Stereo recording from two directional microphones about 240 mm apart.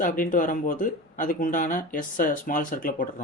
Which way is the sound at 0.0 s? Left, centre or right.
Left.